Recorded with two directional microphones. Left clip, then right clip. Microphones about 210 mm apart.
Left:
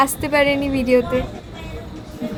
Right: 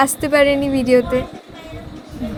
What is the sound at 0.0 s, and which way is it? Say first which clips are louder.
A woman's voice: right 2 dB; 15° right (ahead or behind).